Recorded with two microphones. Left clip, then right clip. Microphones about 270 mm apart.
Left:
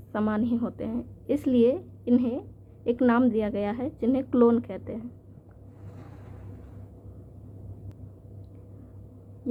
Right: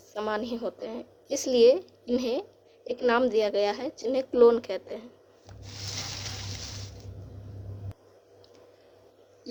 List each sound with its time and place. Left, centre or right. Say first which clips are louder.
0.1 s a woman's voice: left 2 dB; right